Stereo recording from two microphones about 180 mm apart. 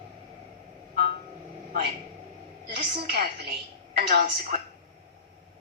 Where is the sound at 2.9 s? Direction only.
60° right (ahead or behind).